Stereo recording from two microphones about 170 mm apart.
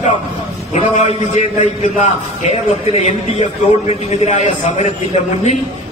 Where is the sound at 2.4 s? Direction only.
40° left (ahead or behind).